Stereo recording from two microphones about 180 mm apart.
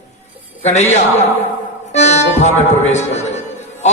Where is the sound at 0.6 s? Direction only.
40° left (ahead or behind).